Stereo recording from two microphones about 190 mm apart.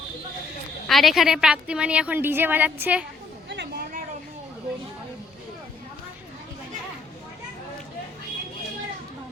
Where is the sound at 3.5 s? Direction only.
65° right (ahead or behind).